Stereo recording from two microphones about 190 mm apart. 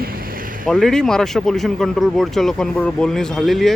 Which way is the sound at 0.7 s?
Centre (ahead or behind).